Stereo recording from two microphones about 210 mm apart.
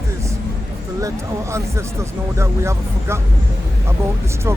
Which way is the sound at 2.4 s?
15° right (ahead or behind).